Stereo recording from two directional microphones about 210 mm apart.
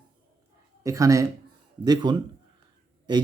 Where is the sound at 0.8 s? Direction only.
15° right (ahead or behind).